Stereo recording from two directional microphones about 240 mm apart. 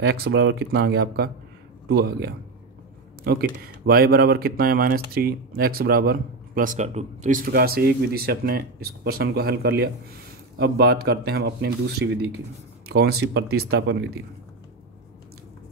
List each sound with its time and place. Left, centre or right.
0.0 s speech: right